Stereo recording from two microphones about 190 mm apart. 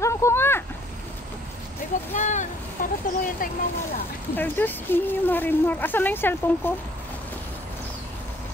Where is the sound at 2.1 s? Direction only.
40° left (ahead or behind).